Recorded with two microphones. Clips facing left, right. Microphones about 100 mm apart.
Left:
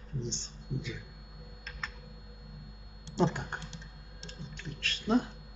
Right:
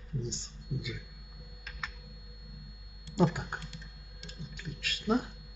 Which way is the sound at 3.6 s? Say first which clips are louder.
Left 1 dB; 25° left (ahead or behind).